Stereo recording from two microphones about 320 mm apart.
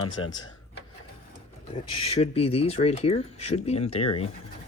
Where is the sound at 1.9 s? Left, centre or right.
Centre.